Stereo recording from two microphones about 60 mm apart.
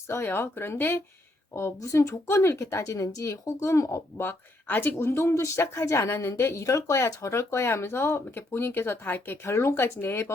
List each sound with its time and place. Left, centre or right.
0.1 s speech: left
1.5 s speech: left
3.2 s speech: left
4.2 s speech: left
4.9 s speech: left